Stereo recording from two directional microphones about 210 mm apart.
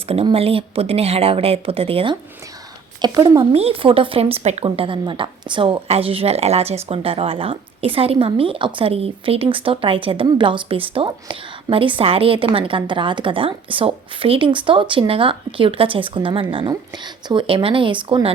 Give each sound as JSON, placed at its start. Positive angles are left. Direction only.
{"t": 0.1, "sound": "speech", "side_deg": -25}